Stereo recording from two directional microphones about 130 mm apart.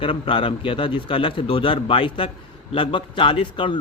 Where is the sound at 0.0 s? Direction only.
40° left (ahead or behind).